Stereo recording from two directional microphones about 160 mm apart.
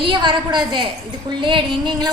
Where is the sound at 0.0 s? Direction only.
30° right (ahead or behind).